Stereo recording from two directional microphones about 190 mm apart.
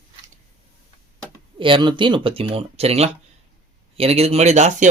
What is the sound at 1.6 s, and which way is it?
Speech, 25° right (ahead or behind).